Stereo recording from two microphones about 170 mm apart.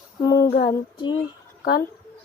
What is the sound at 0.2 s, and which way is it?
Female singing, 25° left (ahead or behind).